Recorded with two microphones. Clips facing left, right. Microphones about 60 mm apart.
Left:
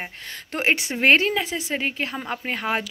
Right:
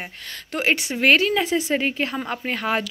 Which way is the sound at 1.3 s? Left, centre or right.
Centre.